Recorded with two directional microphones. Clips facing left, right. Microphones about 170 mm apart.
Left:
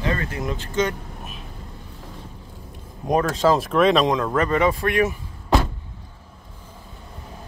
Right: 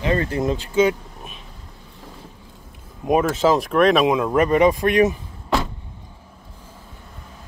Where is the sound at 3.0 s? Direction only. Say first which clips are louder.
Right 2 dB; 5° right (ahead or behind).